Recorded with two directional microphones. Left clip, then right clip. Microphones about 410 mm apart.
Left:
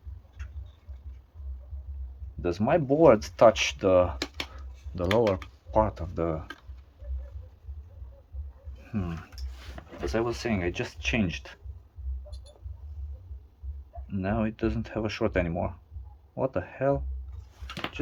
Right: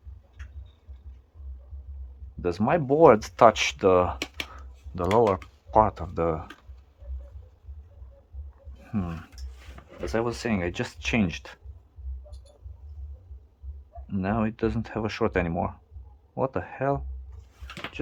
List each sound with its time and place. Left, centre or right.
2.4 s speech: centre
8.8 s a sound: centre
10.1 s speech: centre
14.1 s speech: centre